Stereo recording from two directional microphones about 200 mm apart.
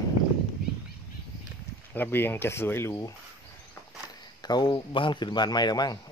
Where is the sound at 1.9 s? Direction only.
10° left (ahead or behind).